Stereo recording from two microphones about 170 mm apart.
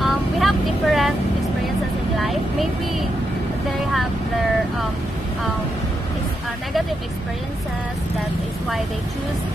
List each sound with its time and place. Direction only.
0.0 s vehicle: centre (ahead or behind)
2.1 s vehicle: centre (ahead or behind)